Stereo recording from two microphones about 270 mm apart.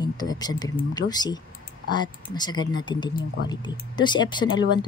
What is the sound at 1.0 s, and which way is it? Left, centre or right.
Speech, centre.